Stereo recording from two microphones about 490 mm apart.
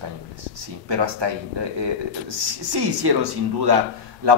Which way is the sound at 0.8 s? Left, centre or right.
Right.